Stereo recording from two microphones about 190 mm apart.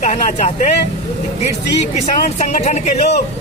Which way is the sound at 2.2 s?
35° left (ahead or behind).